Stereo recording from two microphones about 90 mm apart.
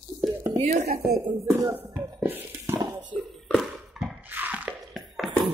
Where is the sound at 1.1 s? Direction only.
40° right (ahead or behind).